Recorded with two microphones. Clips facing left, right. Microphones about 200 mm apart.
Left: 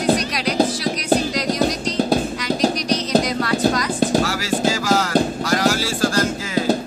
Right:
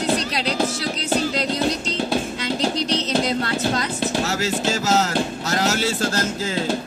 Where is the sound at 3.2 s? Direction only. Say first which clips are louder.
Left 2 dB; 25° right (ahead or behind).